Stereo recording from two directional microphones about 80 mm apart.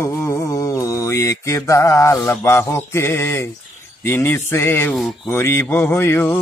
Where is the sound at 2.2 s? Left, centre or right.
Left.